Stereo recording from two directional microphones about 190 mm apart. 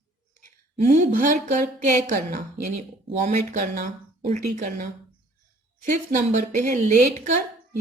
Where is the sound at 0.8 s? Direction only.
45° right (ahead or behind).